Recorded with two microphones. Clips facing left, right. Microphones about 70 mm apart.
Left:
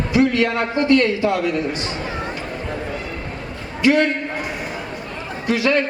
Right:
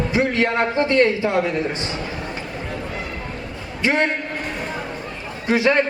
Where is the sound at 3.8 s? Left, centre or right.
Right.